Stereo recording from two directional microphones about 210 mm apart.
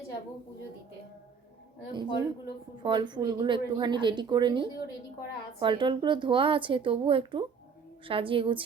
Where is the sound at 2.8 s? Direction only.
20° right (ahead or behind).